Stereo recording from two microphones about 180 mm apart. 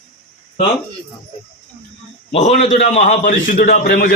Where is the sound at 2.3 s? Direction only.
35° left (ahead or behind).